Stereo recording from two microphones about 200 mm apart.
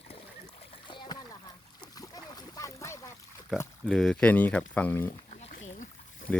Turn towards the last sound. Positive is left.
turn(degrees=10)  # may be behind; listen again after turning